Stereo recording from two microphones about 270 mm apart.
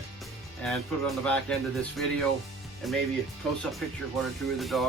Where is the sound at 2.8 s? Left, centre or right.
Centre.